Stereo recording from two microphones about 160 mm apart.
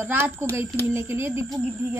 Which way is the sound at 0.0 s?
15° right (ahead or behind).